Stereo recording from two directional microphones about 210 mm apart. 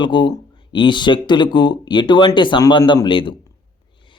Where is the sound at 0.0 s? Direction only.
20° left (ahead or behind).